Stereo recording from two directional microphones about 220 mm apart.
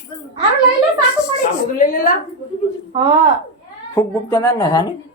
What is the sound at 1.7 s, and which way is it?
Speech, 40° left (ahead or behind).